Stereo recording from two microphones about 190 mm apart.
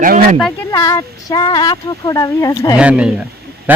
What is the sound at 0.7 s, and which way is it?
Speech, 20° left (ahead or behind).